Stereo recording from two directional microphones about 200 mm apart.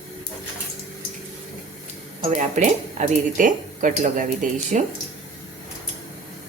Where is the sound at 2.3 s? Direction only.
40° right (ahead or behind).